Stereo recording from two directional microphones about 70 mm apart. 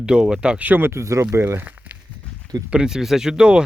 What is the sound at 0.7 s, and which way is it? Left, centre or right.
Speech, right.